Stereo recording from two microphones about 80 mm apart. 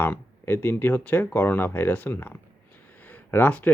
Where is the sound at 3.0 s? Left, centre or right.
Left.